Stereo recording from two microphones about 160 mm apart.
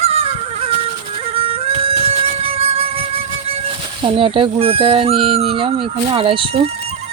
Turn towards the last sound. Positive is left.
turn(degrees=-35)  # may be behind; listen again after turning